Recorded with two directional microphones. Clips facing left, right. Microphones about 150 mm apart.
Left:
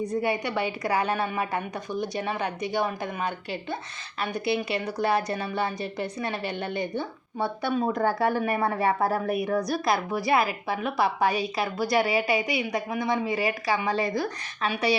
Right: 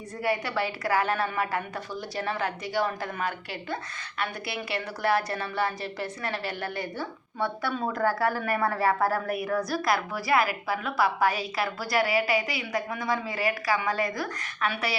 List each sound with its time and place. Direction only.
0.1 s a woman's voice: 20° left (ahead or behind)